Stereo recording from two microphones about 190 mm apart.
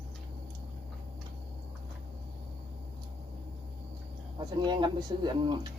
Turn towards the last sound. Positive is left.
turn(degrees=-20)  # may be behind; listen again after turning